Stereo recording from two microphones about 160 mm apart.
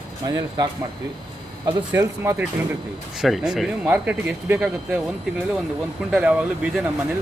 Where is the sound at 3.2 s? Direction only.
Centre (ahead or behind).